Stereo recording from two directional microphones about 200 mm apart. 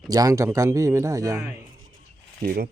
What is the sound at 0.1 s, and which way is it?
Speech, 15° right (ahead or behind).